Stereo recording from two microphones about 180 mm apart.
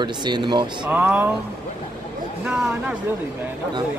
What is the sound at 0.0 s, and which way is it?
Speech, 25° right (ahead or behind).